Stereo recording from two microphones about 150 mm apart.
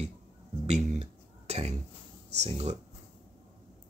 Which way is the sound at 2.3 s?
45° right (ahead or behind).